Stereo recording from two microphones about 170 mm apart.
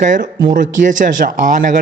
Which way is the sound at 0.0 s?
50° right (ahead or behind).